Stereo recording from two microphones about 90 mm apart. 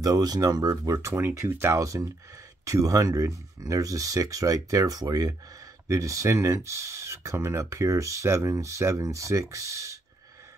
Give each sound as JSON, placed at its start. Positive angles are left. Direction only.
{"t": 0.0, "sound": "speech", "side_deg": -45}